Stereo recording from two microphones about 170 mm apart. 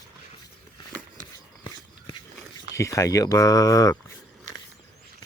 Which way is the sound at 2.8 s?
20° left (ahead or behind).